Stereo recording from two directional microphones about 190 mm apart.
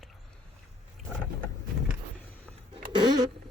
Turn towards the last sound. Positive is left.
turn(degrees=-20)  # may be behind; listen again after turning